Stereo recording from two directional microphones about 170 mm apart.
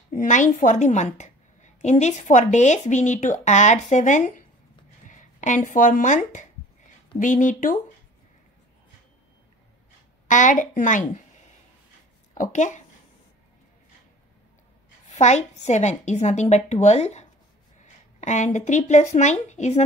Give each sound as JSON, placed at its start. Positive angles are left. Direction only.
{"t": 0.1, "sound": "a woman's voice", "side_deg": 50}
{"t": 10.2, "sound": "a woman's voice", "side_deg": 50}
{"t": 12.4, "sound": "a woman's voice", "side_deg": 45}
{"t": 15.0, "sound": "a woman's voice", "side_deg": 40}